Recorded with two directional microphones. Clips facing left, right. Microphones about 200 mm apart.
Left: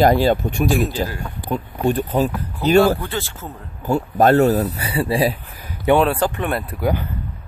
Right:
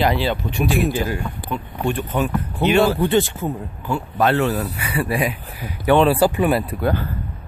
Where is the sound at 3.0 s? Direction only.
15° right (ahead or behind).